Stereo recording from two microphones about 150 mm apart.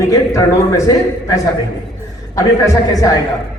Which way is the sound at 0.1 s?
25° left (ahead or behind).